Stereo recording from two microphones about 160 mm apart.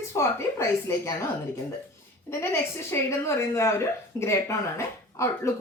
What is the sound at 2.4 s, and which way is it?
A woman's voice, 15° left (ahead or behind).